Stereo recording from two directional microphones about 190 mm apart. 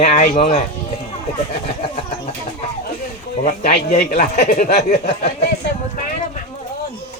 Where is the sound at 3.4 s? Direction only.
40° left (ahead or behind).